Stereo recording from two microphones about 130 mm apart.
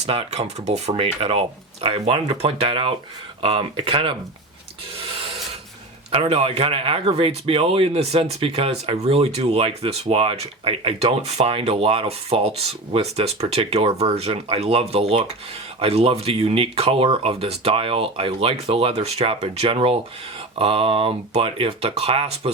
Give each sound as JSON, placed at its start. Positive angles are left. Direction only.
{"t": 0.0, "sound": "speech", "side_deg": -55}
{"t": 6.1, "sound": "speech", "side_deg": -50}